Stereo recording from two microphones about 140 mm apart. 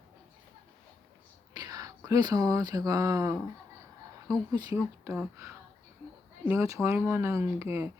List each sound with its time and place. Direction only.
1.5 s speech: 25° right (ahead or behind)
6.4 s speech: 20° right (ahead or behind)